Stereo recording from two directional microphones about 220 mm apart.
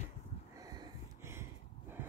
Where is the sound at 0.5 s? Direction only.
15° right (ahead or behind).